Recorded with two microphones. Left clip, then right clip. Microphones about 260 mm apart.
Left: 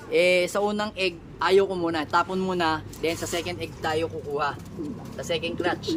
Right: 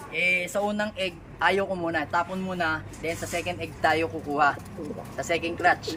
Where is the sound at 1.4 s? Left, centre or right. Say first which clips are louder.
Left 3 dB; centre.